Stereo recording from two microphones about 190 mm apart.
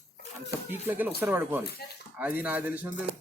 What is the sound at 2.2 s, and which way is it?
Speech, 10° right (ahead or behind).